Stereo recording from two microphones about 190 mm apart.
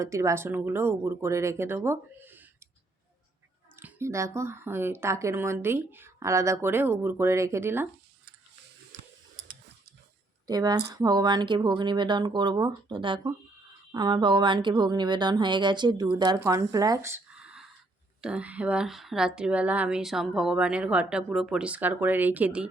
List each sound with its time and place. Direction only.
0.0 s speech: 15° right (ahead or behind)
3.8 s speech: 10° right (ahead or behind)
10.4 s a woman's voice: 20° right (ahead or behind)